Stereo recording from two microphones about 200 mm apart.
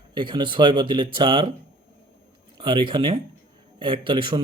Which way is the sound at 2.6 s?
25° right (ahead or behind).